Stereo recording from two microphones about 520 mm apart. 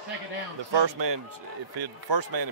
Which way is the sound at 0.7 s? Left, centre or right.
Right.